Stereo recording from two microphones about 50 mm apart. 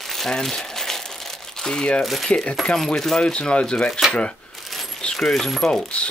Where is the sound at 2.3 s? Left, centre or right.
Centre.